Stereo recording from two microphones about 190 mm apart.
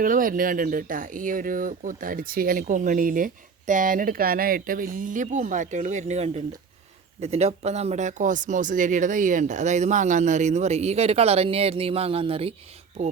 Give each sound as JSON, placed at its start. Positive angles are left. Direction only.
{"t": 0.0, "sound": "speech", "side_deg": -45}